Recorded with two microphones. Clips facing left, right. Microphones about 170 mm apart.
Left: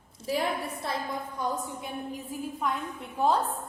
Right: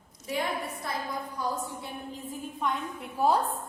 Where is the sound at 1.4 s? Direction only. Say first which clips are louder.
Left 1 dB; 20° left (ahead or behind).